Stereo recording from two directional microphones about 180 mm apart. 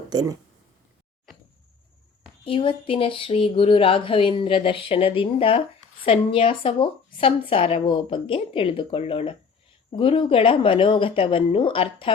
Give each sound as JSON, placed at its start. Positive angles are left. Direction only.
{"t": 0.1, "sound": "speech", "side_deg": -20}
{"t": 2.4, "sound": "speech", "side_deg": 30}